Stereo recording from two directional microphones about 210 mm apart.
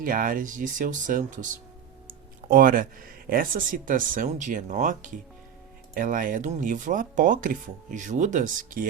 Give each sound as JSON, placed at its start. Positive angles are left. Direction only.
{"t": 0.0, "sound": "speech", "side_deg": -40}